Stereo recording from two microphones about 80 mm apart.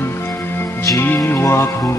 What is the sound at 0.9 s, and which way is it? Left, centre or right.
Music, left.